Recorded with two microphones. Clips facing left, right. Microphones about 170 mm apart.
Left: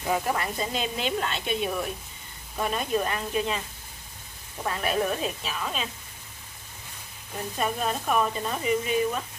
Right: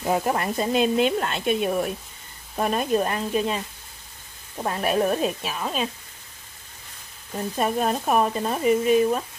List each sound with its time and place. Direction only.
0.1 s speech: 45° right (ahead or behind)
4.6 s speech: 45° right (ahead or behind)
7.5 s speech: 40° right (ahead or behind)